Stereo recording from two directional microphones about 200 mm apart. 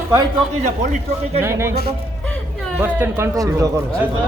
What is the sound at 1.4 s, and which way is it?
Speech, 10° right (ahead or behind).